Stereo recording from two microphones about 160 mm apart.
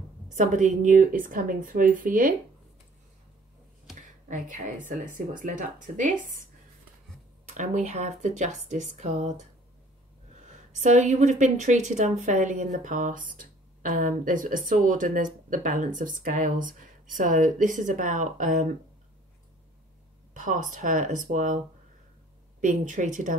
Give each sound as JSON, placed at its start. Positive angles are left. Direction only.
{"t": 0.3, "sound": "speech", "side_deg": -50}
{"t": 4.3, "sound": "speech", "side_deg": -55}
{"t": 7.5, "sound": "a woman's voice", "side_deg": -50}
{"t": 10.8, "sound": "a woman's voice", "side_deg": -45}
{"t": 20.3, "sound": "a woman's voice", "side_deg": -55}
{"t": 22.6, "sound": "a woman's voice", "side_deg": -55}